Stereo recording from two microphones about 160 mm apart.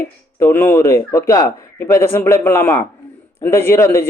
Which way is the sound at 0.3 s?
15° left (ahead or behind).